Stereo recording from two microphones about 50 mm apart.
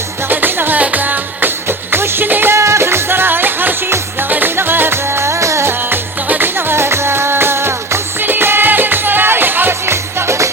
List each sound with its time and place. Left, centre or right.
0.3 s music: right
2.5 s music: right
6.2 s music: right
8.2 s music: right